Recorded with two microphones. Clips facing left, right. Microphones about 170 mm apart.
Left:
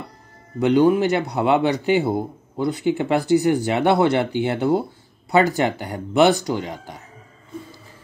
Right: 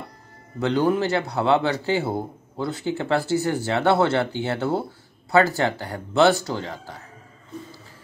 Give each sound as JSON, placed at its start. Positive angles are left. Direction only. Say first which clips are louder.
{"t": 0.6, "sound": "speech", "louder": "left 5 dB", "side_deg": 15}